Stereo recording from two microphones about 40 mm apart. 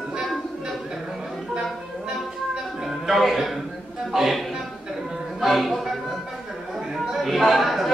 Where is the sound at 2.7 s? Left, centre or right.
Centre.